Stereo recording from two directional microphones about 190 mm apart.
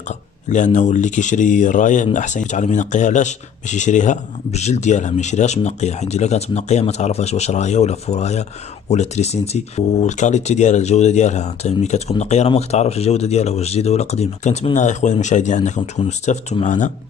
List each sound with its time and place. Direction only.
0.5 s speech: 40° left (ahead or behind)